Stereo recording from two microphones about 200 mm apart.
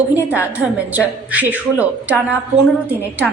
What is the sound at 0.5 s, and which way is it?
A woman's voice, 5° right (ahead or behind).